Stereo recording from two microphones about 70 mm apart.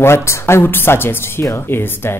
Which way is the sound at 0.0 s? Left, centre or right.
Left.